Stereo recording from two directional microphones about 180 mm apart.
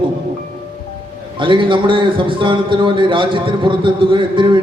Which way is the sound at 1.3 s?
25° right (ahead or behind).